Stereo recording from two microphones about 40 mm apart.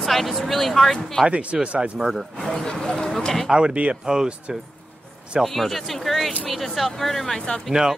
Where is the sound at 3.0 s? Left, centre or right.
Centre.